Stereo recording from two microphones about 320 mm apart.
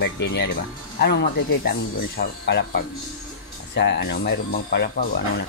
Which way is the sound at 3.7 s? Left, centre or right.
Left.